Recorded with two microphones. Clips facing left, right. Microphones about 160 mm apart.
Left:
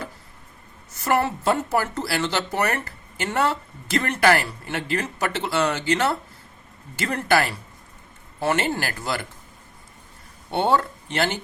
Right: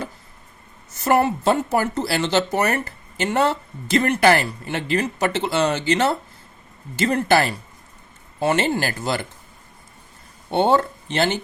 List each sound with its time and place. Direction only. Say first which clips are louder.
1.0 s speech: right 4 dB; 20° right (ahead or behind)
10.5 s speech: right 3 dB; 25° right (ahead or behind)